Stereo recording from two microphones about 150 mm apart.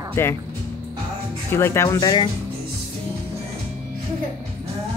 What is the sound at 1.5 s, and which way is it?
Speech, 15° left (ahead or behind).